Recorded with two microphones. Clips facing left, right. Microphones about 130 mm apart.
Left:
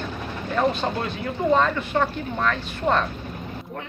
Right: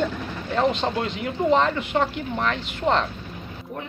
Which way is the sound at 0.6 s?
20° right (ahead or behind).